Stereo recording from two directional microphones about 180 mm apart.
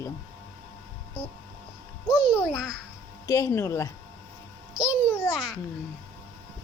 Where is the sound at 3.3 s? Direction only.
15° left (ahead or behind).